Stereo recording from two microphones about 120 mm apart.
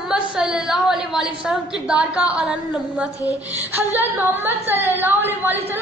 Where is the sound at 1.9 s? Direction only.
10° right (ahead or behind).